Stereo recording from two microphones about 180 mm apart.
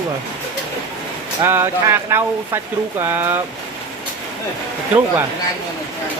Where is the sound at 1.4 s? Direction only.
15° right (ahead or behind).